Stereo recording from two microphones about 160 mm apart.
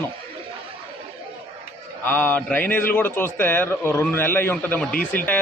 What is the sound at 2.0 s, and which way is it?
A man's voice, 15° left (ahead or behind).